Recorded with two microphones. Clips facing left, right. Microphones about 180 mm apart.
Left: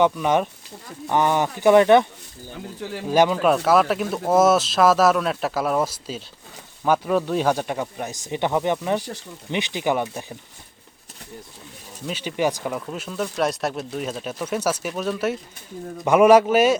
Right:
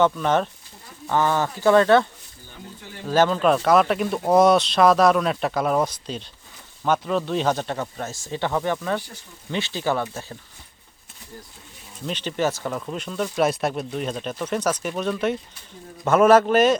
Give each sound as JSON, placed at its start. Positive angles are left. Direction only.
{"t": 0.0, "sound": "speech", "side_deg": 10}
{"t": 3.1, "sound": "speech", "side_deg": 15}
{"t": 12.0, "sound": "speech", "side_deg": 10}